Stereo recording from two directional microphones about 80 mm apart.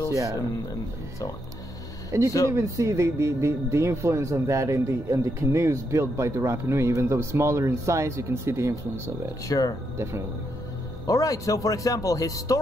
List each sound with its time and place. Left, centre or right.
2.0 s speech: right
9.5 s speech: left
11.1 s speech: left